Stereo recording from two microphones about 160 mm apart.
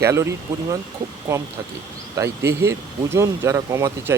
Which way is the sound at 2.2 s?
20° right (ahead or behind).